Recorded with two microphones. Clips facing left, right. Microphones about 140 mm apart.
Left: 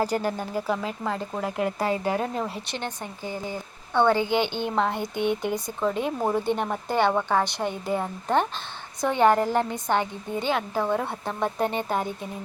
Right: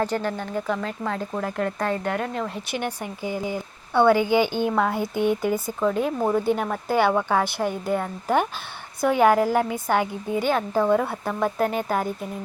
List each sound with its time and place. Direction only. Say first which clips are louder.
0.0 s speech: even; 10° left (ahead or behind)
2.1 s speech: even; 25° left (ahead or behind)
2.6 s a woman's voice: right 4 dB; 10° right (ahead or behind)